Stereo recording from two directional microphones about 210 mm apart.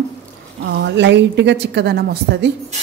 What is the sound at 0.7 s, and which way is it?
A woman's voice, 55° right (ahead or behind).